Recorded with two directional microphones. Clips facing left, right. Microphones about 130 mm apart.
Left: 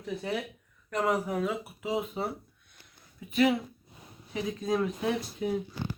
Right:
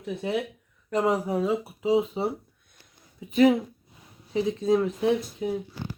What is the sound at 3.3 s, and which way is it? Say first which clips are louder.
Speech: right 6 dB; 40° right (ahead or behind).